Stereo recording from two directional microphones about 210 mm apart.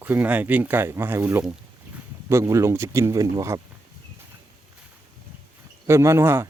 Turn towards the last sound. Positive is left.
turn(degrees=-10)  # may be behind; listen again after turning